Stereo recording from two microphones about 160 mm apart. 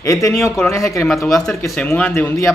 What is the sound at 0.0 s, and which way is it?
Speech, 20° left (ahead or behind).